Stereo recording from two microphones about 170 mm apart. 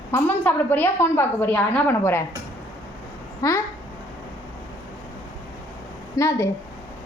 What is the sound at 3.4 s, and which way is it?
Speech, 20° left (ahead or behind).